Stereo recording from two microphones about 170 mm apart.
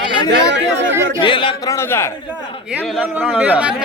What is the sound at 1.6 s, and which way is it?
Speech, 15° left (ahead or behind).